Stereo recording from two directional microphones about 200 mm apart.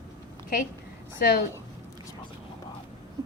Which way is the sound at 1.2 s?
50° left (ahead or behind).